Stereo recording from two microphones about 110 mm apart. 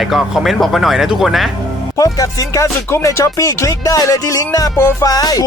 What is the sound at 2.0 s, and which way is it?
Music, 30° left (ahead or behind).